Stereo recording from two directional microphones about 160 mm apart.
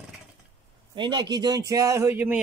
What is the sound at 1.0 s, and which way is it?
Speech, 25° right (ahead or behind).